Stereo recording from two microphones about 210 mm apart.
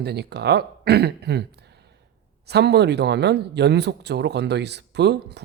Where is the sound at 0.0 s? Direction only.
50° right (ahead or behind).